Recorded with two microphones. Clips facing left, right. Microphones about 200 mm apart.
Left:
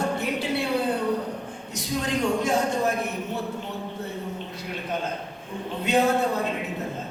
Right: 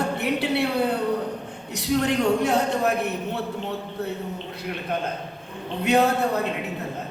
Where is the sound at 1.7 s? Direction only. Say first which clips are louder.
Right 5 dB; 65° right (ahead or behind).